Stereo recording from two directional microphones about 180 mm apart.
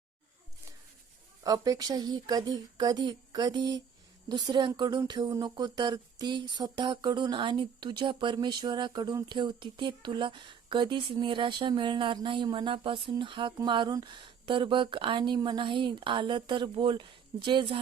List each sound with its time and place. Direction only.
1.5 s speech: 20° right (ahead or behind)